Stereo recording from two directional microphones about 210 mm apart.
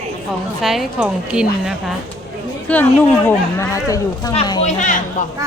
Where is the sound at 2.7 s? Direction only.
5° left (ahead or behind).